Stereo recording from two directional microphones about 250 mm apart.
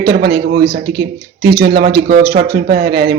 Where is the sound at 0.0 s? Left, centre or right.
Right.